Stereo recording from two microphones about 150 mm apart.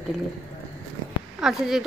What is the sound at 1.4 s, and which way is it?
Speech, 5° right (ahead or behind).